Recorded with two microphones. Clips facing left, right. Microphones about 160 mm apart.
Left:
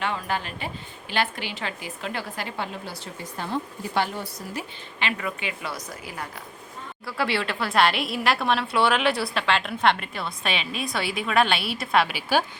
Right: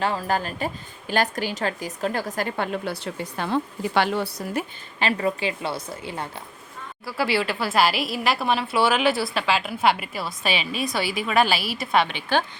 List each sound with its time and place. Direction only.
0.0 s a woman's voice: 35° right (ahead or behind); by 4.3 s 85° right
4.6 s a woman's voice: 55° right (ahead or behind)
4.9 s a woman's voice: 35° right (ahead or behind)
7.0 s a woman's voice: centre (ahead or behind)